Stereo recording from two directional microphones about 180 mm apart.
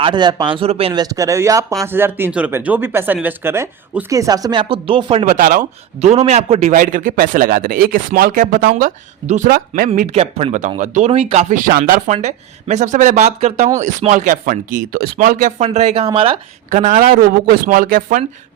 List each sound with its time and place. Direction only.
0.0 s speech: 25° right (ahead or behind)
1.0 s speech: 20° right (ahead or behind)
5.2 s a man's voice: 45° right (ahead or behind)
10.1 s speech: 35° right (ahead or behind); by 12.1 s 50° right (ahead or behind)
12.1 s speech: 40° right (ahead or behind)
16.6 s a man's voice: 45° right (ahead or behind)